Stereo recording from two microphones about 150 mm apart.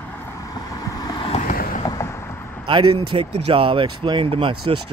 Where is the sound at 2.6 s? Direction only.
35° right (ahead or behind).